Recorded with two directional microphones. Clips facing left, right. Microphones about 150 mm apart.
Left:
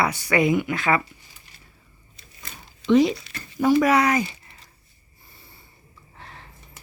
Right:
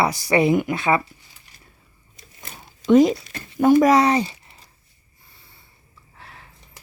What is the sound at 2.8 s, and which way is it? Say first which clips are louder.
Speech: right 3 dB; 45° right (ahead or behind).